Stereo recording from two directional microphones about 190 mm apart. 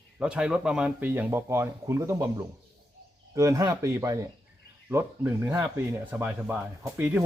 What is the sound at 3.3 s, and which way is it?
Speech, 15° right (ahead or behind).